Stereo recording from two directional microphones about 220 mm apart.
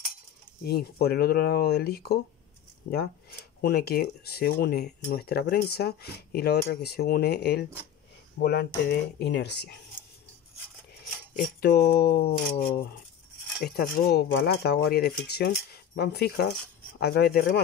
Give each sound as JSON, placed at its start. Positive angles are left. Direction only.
{"t": 0.7, "sound": "speech", "side_deg": 45}
{"t": 11.6, "sound": "speech", "side_deg": 45}